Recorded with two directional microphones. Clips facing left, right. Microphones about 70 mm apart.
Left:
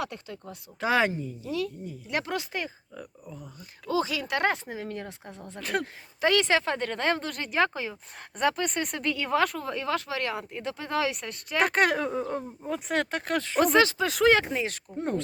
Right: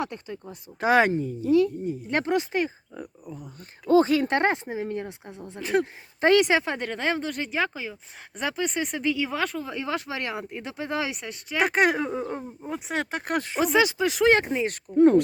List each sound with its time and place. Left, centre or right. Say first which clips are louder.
0.0 s speech: right 3 dB; right
1.5 s speech: right 11 dB; right
3.6 s speech: right 9 dB; right; by 5.6 s centre
6.1 s a woman's voice: right 5 dB; right
6.4 s speech: right 2 dB; centre
13.6 s speech: left 1 dB; centre